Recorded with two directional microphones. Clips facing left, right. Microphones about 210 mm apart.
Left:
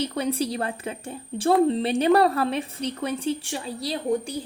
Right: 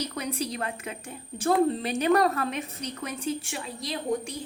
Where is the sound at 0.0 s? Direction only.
30° left (ahead or behind).